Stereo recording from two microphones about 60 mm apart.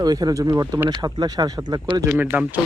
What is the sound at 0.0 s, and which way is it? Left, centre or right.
Speech, right.